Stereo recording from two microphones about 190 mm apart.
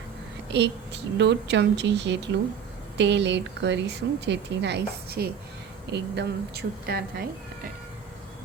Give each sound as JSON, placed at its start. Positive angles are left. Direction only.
{"t": 1.2, "sound": "speech", "side_deg": -65}